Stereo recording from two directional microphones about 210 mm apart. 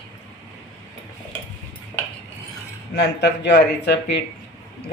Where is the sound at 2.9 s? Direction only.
55° left (ahead or behind).